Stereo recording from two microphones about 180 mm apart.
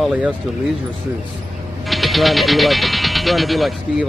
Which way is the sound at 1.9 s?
Centre (ahead or behind).